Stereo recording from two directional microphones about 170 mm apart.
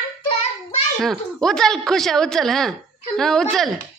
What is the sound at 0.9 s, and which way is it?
Speech, centre (ahead or behind).